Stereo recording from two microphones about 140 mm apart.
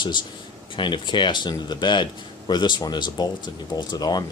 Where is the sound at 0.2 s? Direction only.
35° left (ahead or behind).